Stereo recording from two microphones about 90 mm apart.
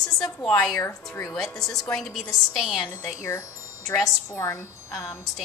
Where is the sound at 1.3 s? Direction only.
5° left (ahead or behind).